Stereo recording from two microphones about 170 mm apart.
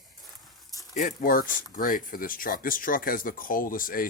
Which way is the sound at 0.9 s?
50° left (ahead or behind).